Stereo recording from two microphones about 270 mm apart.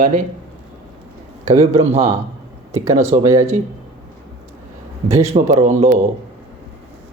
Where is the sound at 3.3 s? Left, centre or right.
Centre.